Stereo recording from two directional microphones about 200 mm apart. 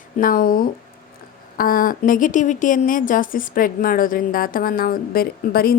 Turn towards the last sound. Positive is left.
turn(degrees=50)  # may be behind; listen again after turning